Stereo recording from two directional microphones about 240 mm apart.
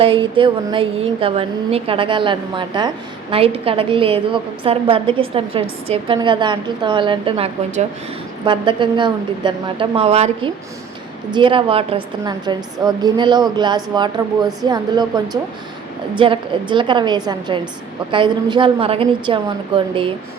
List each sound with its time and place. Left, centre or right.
0.0 s a woman's voice: right